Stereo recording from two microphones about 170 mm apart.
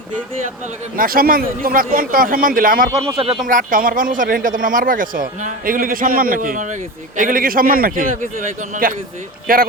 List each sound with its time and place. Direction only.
0.9 s speech: 60° right (ahead or behind)
3.1 s speech: 30° right (ahead or behind)
3.3 s speech: 50° right (ahead or behind)